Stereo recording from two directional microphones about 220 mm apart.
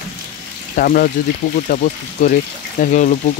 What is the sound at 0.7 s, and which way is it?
Speech, 40° left (ahead or behind).